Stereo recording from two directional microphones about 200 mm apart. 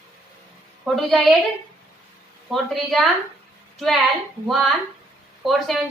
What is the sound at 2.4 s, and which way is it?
A woman's voice, centre (ahead or behind).